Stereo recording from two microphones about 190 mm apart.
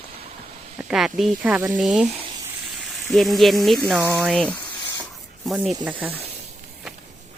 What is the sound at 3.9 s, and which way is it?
Speech, 15° right (ahead or behind).